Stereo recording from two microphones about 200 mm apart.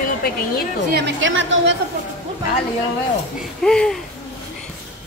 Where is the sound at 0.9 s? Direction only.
55° right (ahead or behind).